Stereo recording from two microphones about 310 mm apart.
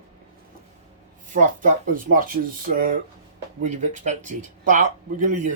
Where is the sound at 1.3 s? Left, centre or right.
Right.